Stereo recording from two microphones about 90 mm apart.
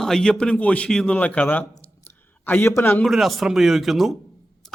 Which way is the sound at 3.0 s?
Centre (ahead or behind).